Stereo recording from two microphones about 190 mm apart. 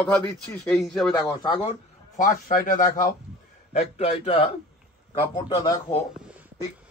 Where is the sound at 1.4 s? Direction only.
30° left (ahead or behind).